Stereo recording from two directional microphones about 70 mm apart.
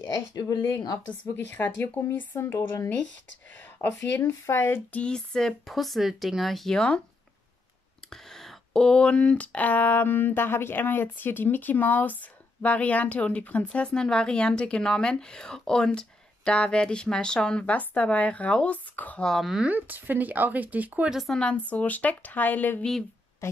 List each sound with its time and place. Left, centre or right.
0.3 s speech: left
1.0 s speech: left
5.0 s speech: centre
8.1 s speech: centre; by 19.2 s left
19.6 s speech: right
21.1 s speech: centre
21.4 s speech: centre
23.4 s a woman's voice: left